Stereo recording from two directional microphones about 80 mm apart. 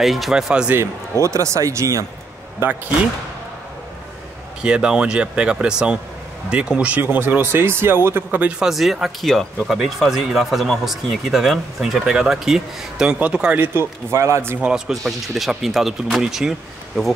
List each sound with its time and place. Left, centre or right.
0.0 s speech: centre
1.2 s speech: right
2.6 s speech: right
4.6 s speech: centre; by 8.4 s right
8.4 s speech: centre
13.6 s speech: right
14.6 s speech: centre